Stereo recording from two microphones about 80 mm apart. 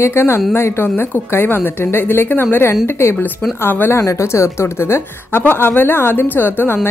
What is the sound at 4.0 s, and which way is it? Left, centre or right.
A woman's voice, left.